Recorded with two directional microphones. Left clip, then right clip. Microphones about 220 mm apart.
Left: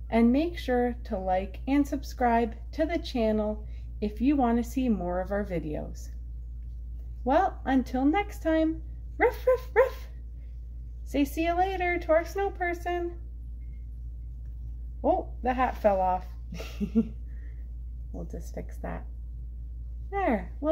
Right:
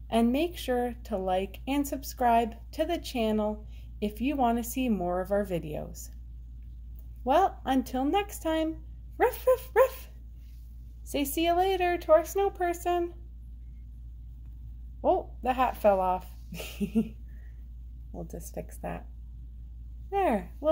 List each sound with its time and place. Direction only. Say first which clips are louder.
0.1 s a woman's voice: left 2 dB; 35° right (ahead or behind)
7.2 s a woman's voice: even; 30° right (ahead or behind)
11.1 s a woman's voice: even; 35° right (ahead or behind)
15.0 s a woman's voice: even; 35° right (ahead or behind)
18.1 s a woman's voice: right 1 dB; 30° right (ahead or behind)
20.1 s speech: right 1 dB; 35° right (ahead or behind)